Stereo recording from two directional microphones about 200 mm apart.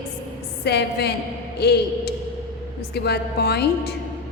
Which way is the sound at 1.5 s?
55° left (ahead or behind).